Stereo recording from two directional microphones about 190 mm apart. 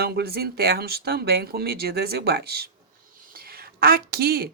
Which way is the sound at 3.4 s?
55° right (ahead or behind).